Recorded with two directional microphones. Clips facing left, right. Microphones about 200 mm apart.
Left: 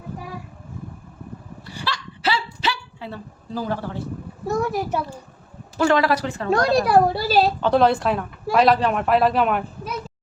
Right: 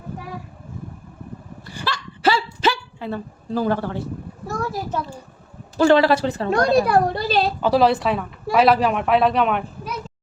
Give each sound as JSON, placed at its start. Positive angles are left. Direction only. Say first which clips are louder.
{"t": 1.8, "sound": "a sound", "louder": "right 5 dB", "side_deg": -45}
{"t": 4.4, "sound": "a child's voice", "louder": "left 4 dB", "side_deg": 15}
{"t": 5.7, "sound": "speech", "louder": "right 4 dB", "side_deg": -30}
{"t": 6.7, "sound": "a woman's voice", "louder": "even", "side_deg": 0}